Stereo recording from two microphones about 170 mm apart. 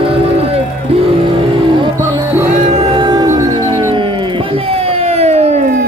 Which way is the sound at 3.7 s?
30° right (ahead or behind).